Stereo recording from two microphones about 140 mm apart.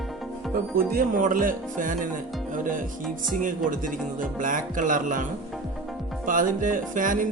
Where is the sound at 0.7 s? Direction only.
80° right.